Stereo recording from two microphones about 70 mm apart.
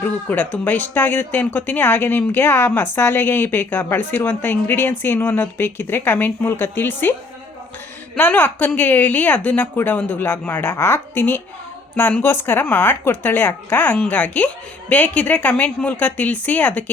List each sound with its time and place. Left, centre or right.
0.0 s a woman's voice: left